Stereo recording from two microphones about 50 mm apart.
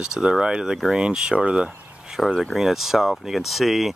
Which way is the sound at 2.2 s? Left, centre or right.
Centre.